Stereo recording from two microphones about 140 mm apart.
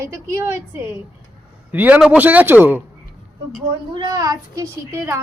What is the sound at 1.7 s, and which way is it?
A man's voice, 10° right (ahead or behind).